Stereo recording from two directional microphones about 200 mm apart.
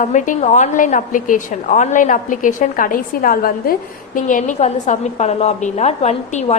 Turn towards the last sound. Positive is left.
turn(degrees=35)  # may be behind; listen again after turning